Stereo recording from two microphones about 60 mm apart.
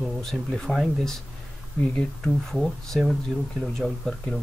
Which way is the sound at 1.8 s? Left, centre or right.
Centre.